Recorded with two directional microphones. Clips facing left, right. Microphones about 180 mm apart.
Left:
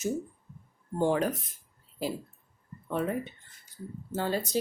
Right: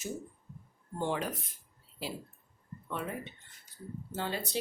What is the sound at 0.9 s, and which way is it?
Speech, 45° left (ahead or behind).